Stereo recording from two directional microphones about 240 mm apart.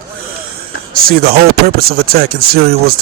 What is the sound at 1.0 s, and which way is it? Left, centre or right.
Speech, right.